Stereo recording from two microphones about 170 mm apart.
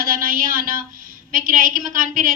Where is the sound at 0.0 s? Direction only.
55° right (ahead or behind).